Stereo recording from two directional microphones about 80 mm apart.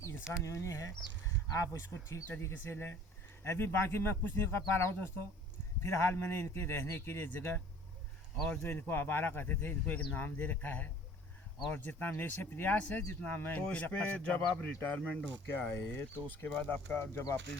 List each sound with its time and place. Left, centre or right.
0.4 s speech: left